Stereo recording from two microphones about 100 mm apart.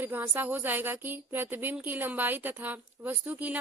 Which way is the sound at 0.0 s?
20° right (ahead or behind).